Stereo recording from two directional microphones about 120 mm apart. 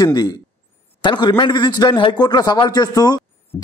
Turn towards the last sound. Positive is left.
turn(degrees=15)  # may be behind; listen again after turning